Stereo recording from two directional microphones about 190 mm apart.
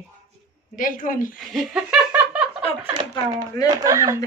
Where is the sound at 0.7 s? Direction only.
45° left (ahead or behind).